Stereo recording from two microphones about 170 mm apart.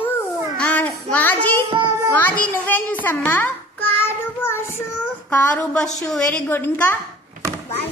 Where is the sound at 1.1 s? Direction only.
10° left (ahead or behind).